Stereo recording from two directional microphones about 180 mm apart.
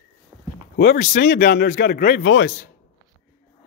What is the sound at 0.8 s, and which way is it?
Speech, 60° left (ahead or behind).